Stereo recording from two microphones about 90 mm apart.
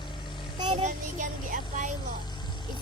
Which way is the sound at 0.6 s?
55° right (ahead or behind).